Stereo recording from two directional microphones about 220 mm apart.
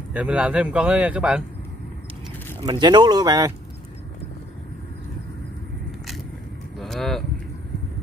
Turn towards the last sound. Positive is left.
turn(degrees=0)  # may be behind; listen again after turning